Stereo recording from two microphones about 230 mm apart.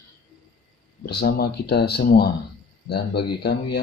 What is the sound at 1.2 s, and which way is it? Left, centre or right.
Speech, left.